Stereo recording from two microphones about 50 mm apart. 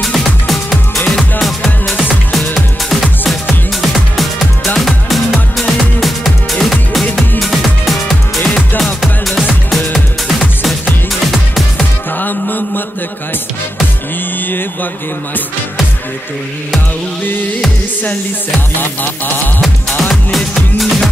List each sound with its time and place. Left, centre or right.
0.0 s music: centre
10.2 s music: centre
12.2 s music: left
18.8 s music: left
20.0 s music: centre